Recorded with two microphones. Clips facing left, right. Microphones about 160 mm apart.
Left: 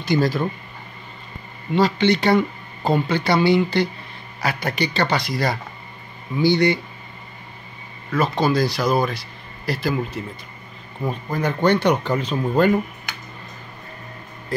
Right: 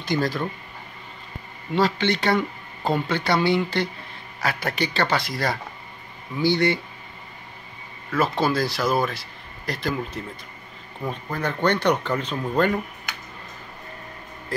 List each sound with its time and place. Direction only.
0.0 s speech: 5° left (ahead or behind)
1.8 s speech: centre (ahead or behind)
8.2 s speech: 5° right (ahead or behind)